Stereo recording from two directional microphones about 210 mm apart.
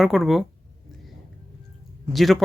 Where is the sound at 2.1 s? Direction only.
Centre (ahead or behind).